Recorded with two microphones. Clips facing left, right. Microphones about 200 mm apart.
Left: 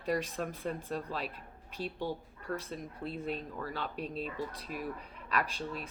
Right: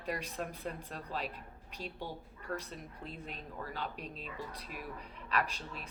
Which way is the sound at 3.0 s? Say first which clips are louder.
Left 11 dB; 40° left (ahead or behind).